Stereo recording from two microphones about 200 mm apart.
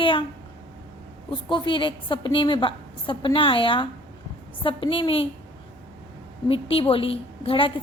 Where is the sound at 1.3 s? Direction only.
25° left (ahead or behind).